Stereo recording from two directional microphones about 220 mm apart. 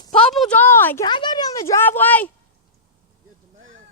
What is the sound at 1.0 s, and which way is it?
Speech, 20° left (ahead or behind).